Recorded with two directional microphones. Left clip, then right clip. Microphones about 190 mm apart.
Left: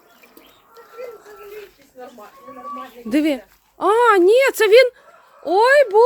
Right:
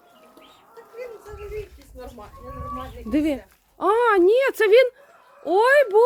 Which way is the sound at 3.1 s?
20° left (ahead or behind).